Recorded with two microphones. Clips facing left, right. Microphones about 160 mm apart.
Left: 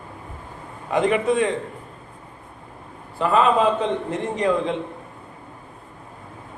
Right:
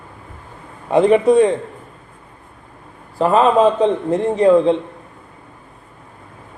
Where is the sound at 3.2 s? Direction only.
35° right (ahead or behind).